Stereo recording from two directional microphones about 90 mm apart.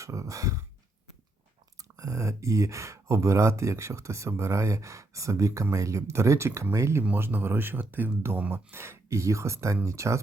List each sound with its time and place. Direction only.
0.0 s beatboxing: 35° right (ahead or behind)
1.8 s speech: 40° right (ahead or behind)